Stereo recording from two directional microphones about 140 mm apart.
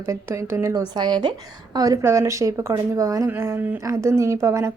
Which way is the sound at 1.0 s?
30° right (ahead or behind).